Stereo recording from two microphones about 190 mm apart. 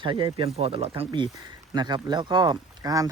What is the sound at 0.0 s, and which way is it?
Speech, 25° right (ahead or behind).